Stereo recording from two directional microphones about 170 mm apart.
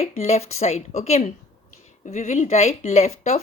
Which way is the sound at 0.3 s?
40° left (ahead or behind).